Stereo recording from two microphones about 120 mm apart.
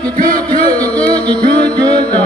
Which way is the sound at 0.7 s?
10° left (ahead or behind).